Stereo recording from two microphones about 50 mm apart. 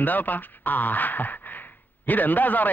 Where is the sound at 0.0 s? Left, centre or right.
Left.